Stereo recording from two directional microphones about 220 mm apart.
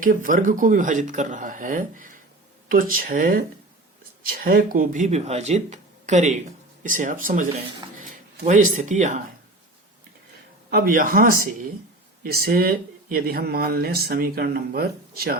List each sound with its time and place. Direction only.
0.0 s speech: 35° right (ahead or behind)
8.4 s speech: 35° right (ahead or behind)
10.7 s speech: 40° right (ahead or behind)